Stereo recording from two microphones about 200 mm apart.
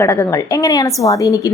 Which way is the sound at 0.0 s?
15° left (ahead or behind).